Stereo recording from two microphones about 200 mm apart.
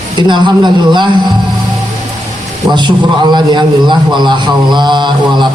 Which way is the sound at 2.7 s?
20° right (ahead or behind).